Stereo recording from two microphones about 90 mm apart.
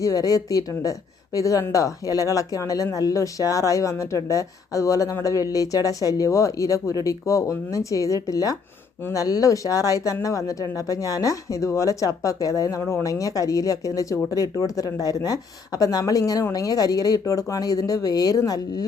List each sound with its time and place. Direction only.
0.0 s a woman's voice: 40° left (ahead or behind)